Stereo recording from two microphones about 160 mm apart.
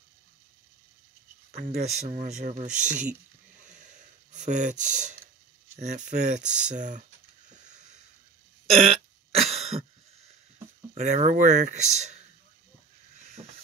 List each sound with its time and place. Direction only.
1.5 s speech: 75° right (ahead or behind)
1.9 s speech: 50° right (ahead or behind)
4.3 s speech: 50° right (ahead or behind)
6.4 s speech: 5° right (ahead or behind)
7.4 s a sound: 50° right (ahead or behind)
9.3 s cough: 40° right (ahead or behind)
11.0 s speech: 50° right (ahead or behind)